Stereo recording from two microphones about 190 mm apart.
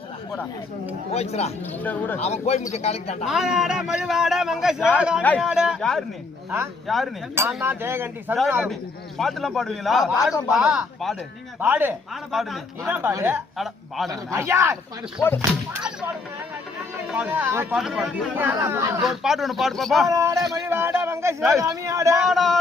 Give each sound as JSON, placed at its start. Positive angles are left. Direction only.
{"t": 1.1, "sound": "speech", "side_deg": 35}
{"t": 1.8, "sound": "speech", "side_deg": 10}
{"t": 2.2, "sound": "speech", "side_deg": 35}
{"t": 3.2, "sound": "a man's voice", "side_deg": 0}
{"t": 7.3, "sound": "a man's voice", "side_deg": -10}
{"t": 8.7, "sound": "a man's voice", "side_deg": 0}
{"t": 14.1, "sound": "a man's voice", "side_deg": -15}
{"t": 15.2, "sound": "a man's voice", "side_deg": 5}
{"t": 17.1, "sound": "a man's voice", "side_deg": -10}
{"t": 18.3, "sound": "a man's voice", "side_deg": -10}
{"t": 20.1, "sound": "a man's voice", "side_deg": -15}
{"t": 22.1, "sound": "a man's voice", "side_deg": 0}